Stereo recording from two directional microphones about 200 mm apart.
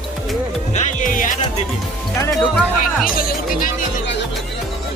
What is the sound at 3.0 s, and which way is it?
Speech, 45° left (ahead or behind).